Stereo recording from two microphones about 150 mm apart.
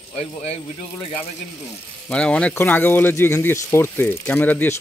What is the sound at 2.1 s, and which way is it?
Speech, 5° left (ahead or behind).